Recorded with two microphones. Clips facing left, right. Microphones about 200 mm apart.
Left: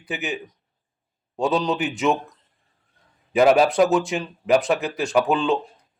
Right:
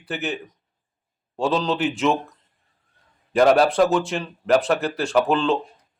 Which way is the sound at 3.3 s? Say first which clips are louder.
Even; 5° left (ahead or behind).